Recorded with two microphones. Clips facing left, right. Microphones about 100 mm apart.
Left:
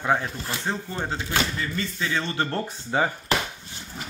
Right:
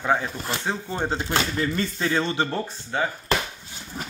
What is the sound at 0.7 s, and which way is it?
Speech, 20° right (ahead or behind).